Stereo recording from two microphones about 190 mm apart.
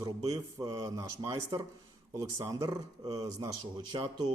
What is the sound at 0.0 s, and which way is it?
A man's voice, 20° right (ahead or behind).